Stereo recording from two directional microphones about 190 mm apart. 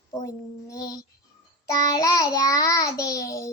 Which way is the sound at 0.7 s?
15° left (ahead or behind).